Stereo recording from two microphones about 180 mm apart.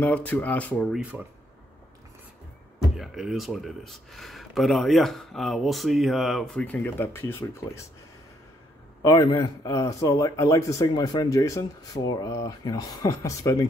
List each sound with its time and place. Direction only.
0.0 s speech: 10° left (ahead or behind)
0.9 s speech: 10° right (ahead or behind)
2.8 s speech: centre (ahead or behind)
9.0 s speech: 20° left (ahead or behind)